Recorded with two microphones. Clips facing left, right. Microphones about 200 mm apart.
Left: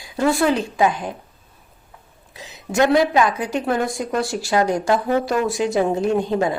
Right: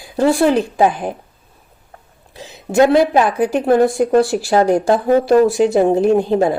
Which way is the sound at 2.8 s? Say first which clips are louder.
Right 4 dB; 30° right (ahead or behind).